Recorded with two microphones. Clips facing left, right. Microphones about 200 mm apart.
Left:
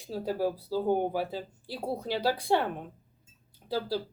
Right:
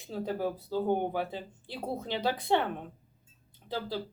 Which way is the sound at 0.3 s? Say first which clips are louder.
Left 4 dB; 10° left (ahead or behind).